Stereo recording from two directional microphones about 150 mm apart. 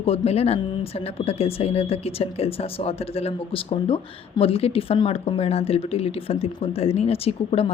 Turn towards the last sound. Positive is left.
turn(degrees=40)  # may be behind; listen again after turning